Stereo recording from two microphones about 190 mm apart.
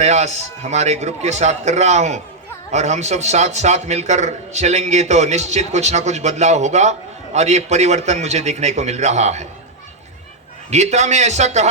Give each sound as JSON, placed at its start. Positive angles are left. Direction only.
{"t": 0.0, "sound": "a man's voice", "side_deg": -35}
{"t": 10.7, "sound": "a man's voice", "side_deg": -35}